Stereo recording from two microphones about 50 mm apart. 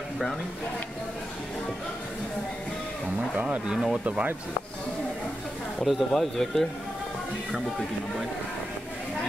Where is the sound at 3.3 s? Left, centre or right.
Right.